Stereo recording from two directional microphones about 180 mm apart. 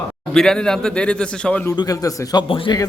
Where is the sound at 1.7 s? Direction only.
20° left (ahead or behind).